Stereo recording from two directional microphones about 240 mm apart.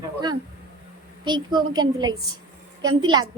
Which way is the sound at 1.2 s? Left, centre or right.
Centre.